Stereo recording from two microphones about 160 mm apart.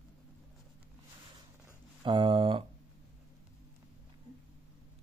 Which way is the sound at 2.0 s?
30° right (ahead or behind).